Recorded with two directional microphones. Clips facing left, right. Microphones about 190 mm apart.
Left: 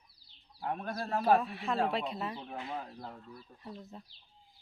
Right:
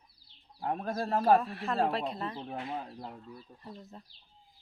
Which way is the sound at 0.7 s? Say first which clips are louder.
Right 3 dB; 30° right (ahead or behind).